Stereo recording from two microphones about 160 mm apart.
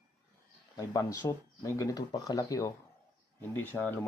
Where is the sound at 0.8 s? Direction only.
20° left (ahead or behind).